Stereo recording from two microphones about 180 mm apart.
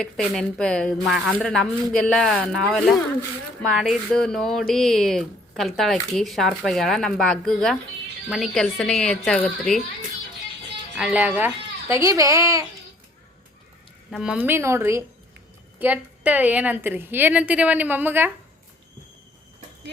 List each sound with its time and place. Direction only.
0.0 s speech: 5° left (ahead or behind)
10.9 s a woman's voice: 5° right (ahead or behind)
14.1 s a woman's voice: 5° right (ahead or behind)